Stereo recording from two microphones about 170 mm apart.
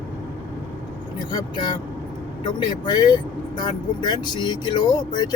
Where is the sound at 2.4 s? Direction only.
25° left (ahead or behind).